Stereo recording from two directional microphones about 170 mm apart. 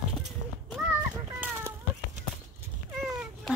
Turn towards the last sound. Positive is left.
turn(degrees=0)  # may be behind; listen again after turning